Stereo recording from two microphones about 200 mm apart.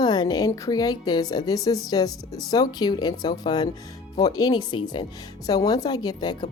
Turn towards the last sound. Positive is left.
turn(degrees=20)  # may be behind; listen again after turning